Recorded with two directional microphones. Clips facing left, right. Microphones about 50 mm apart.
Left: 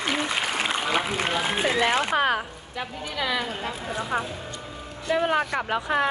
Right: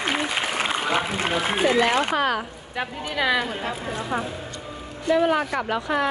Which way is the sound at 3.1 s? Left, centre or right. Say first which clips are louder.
Right 6 dB; right.